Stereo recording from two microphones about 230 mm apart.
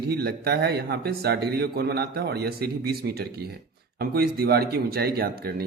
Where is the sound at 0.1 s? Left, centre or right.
Right.